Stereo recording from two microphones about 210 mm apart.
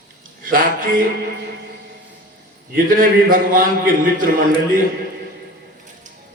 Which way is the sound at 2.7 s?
40° right (ahead or behind).